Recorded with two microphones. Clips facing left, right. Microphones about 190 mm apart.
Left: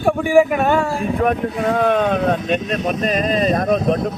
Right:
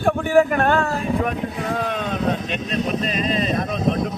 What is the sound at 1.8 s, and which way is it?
Speech, 55° left (ahead or behind).